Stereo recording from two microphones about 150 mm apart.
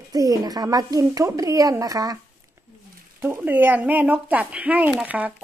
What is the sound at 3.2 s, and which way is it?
Speech, 15° right (ahead or behind).